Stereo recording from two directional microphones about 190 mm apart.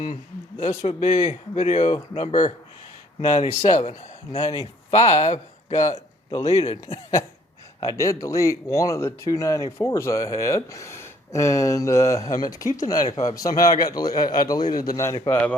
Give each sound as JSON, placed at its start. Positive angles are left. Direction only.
{"t": 0.6, "sound": "speech", "side_deg": 35}
{"t": 7.8, "sound": "a man's voice", "side_deg": 15}